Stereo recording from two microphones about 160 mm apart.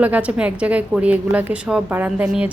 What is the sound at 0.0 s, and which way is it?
A woman's voice, 10° right (ahead or behind).